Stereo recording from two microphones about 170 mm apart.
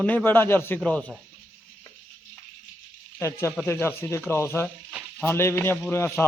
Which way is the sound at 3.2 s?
15° left (ahead or behind).